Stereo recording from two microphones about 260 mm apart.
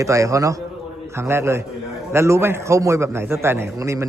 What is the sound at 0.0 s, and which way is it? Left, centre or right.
A man's voice, centre.